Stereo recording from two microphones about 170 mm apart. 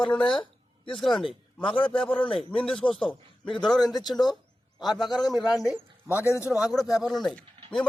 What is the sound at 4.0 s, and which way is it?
Speech, 25° left (ahead or behind).